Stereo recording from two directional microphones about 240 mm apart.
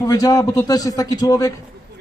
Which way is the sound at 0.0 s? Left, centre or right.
Centre.